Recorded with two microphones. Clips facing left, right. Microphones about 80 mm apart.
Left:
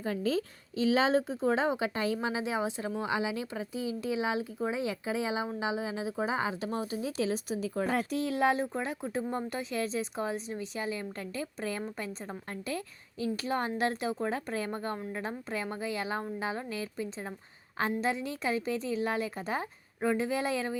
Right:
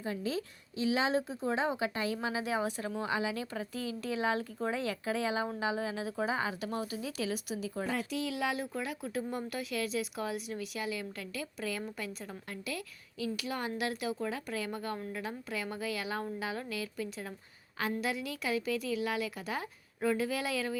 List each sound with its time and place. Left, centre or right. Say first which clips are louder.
0.0 s a woman's voice: left 5 dB; left